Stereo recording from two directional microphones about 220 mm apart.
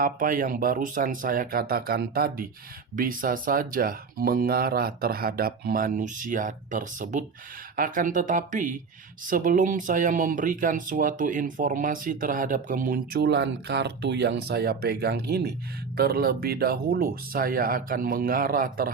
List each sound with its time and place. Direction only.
0.0 s speech: 40° right (ahead or behind)